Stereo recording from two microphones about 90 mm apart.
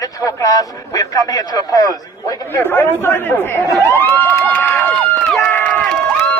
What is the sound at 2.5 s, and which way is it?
Speech, 25° left (ahead or behind).